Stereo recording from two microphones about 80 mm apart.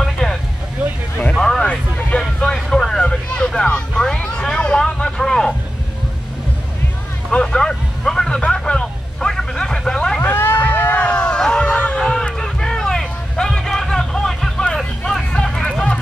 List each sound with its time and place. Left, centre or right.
0.0 s vehicle: centre
1.4 s a sound: centre
7.2 s vehicle: centre
10.2 s vehicle: left
11.0 s music: centre
15.3 s a sound: centre